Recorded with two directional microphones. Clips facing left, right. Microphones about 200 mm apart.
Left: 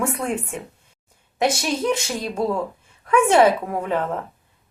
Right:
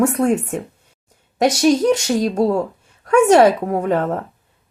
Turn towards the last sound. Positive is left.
turn(degrees=-45)  # may be behind; listen again after turning